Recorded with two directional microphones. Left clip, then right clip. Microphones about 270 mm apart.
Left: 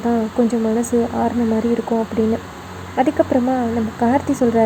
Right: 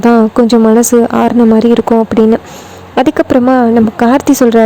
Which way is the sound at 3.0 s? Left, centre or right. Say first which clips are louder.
Right 8 dB; right.